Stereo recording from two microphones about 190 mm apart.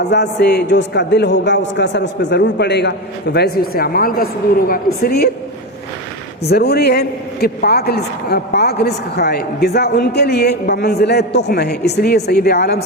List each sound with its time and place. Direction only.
0.0 s a man's voice: 65° left (ahead or behind)
6.5 s a man's voice: 55° left (ahead or behind)